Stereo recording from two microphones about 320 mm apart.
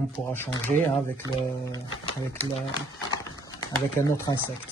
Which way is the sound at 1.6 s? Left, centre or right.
Centre.